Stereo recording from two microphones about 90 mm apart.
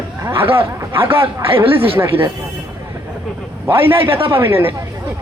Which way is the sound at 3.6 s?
25° right (ahead or behind).